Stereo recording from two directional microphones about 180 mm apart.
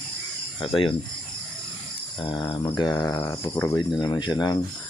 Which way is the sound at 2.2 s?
30° left (ahead or behind).